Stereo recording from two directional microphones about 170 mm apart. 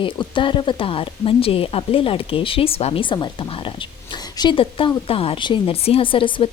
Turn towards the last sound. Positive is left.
turn(degrees=30)  # may be behind; listen again after turning